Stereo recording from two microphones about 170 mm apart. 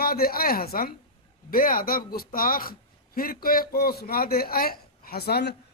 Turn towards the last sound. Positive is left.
turn(degrees=70)  # may be behind; listen again after turning